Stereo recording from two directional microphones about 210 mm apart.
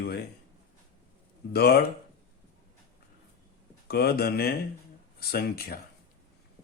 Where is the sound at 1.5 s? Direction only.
50° left (ahead or behind).